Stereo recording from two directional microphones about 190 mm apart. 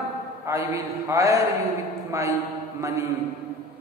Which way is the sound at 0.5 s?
15° right (ahead or behind).